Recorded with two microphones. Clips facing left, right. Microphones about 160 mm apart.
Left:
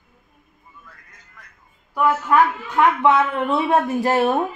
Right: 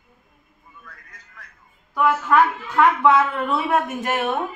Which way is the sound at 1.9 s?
15° left (ahead or behind).